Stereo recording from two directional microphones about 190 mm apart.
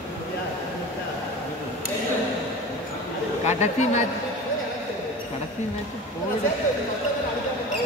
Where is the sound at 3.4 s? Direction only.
40° left (ahead or behind).